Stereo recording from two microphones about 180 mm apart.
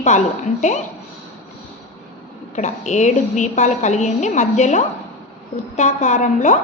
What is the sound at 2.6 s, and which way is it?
A woman's voice, 40° left (ahead or behind).